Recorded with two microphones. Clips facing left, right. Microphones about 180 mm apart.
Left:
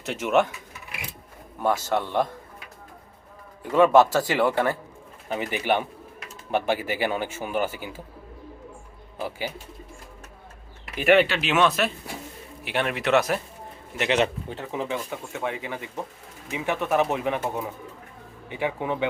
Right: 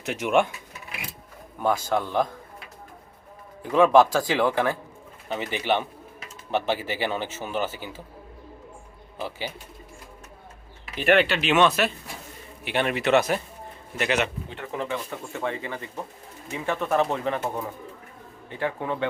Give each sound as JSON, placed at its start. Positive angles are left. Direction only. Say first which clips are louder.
{"t": 0.0, "sound": "speech", "louder": "right 1 dB", "side_deg": 0}
{"t": 1.6, "sound": "speech", "louder": "even", "side_deg": 5}
{"t": 3.8, "sound": "speech", "louder": "even", "side_deg": 5}
{"t": 10.9, "sound": "speech", "louder": "left 2 dB", "side_deg": 5}
{"t": 13.9, "sound": "speech", "louder": "left 2 dB", "side_deg": 20}